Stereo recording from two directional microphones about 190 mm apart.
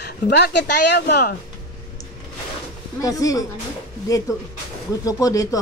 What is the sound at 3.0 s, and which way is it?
Speech, 20° left (ahead or behind).